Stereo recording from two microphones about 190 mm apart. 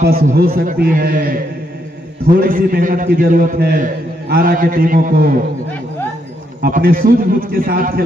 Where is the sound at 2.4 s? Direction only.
50° right (ahead or behind).